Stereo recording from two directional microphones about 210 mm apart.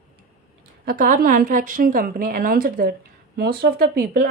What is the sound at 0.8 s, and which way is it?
A woman's voice, 40° right (ahead or behind).